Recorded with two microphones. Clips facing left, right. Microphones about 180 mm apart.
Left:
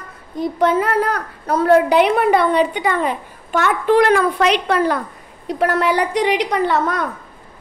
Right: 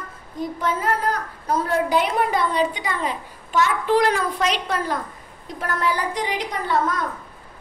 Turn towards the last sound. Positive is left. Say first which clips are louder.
# left 4 dB
turn(degrees=70)  # may be behind; listen again after turning